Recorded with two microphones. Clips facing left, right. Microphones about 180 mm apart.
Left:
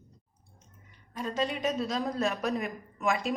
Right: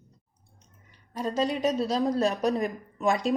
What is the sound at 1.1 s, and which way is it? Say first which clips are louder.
A woman's voice: right 4 dB; 35° right (ahead or behind).